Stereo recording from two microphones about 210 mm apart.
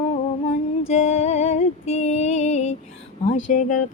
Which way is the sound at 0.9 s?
30° left (ahead or behind).